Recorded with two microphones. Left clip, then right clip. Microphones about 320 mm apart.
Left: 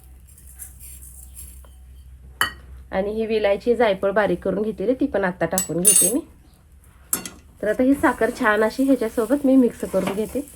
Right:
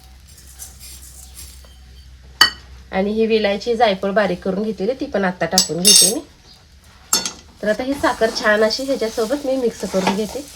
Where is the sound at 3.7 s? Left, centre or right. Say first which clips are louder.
Right 3 dB; centre.